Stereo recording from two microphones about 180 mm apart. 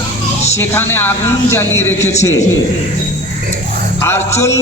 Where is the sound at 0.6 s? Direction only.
10° left (ahead or behind).